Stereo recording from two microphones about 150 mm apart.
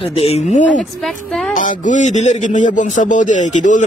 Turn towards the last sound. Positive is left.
turn(degrees=55)  # may be behind; listen again after turning